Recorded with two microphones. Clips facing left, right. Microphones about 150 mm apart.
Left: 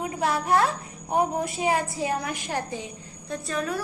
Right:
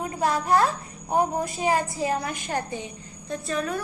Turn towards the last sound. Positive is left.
turn(degrees=0)  # may be behind; listen again after turning